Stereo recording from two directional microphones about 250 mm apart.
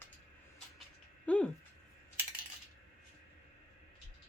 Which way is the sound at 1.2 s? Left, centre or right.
Centre.